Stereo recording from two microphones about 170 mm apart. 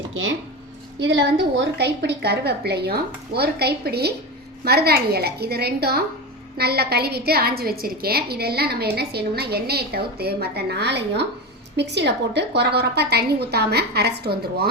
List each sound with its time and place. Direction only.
0.9 s a woman's voice: 90° right; by 14.7 s 70° right (ahead or behind)